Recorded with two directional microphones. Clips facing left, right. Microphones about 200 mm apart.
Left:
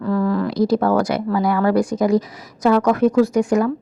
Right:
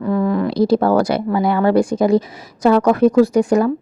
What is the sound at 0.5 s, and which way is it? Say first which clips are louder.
A woman's voice: right 3 dB; 30° right (ahead or behind).